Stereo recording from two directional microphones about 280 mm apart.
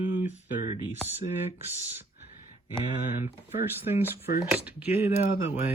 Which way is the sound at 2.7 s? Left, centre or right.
Centre.